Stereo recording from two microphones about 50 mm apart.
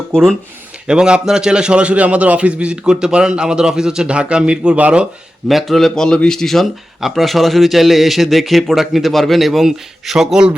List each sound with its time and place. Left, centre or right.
0.1 s speech: centre
0.9 s a man's voice: centre
5.5 s a man's voice: centre